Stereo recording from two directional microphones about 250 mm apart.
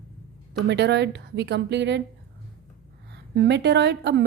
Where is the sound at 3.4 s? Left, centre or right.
Right.